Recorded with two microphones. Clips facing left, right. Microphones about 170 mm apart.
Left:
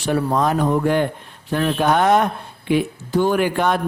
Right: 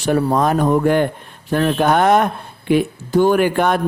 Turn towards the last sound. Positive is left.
turn(degrees=-50)  # may be behind; listen again after turning